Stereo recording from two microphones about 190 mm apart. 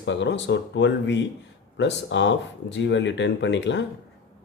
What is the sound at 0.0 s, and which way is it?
Speech, 70° left (ahead or behind).